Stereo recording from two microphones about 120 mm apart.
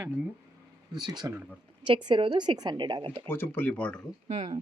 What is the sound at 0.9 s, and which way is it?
A woman's voice, 35° right (ahead or behind).